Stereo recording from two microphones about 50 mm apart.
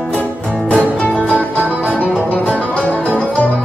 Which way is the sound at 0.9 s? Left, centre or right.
Left.